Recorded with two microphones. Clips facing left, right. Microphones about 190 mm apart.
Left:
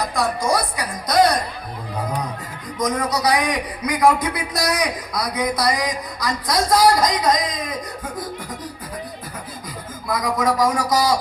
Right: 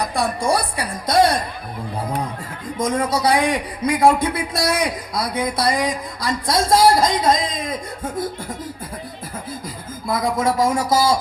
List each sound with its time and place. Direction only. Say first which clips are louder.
0.1 s music: even; 30° right (ahead or behind)
2.7 s a man's voice: right 1 dB; 25° right (ahead or behind)
10.1 s a man's voice: right 1 dB; 25° right (ahead or behind)